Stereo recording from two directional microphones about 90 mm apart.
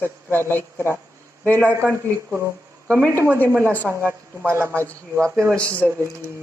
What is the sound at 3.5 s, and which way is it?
Speech, 25° right (ahead or behind).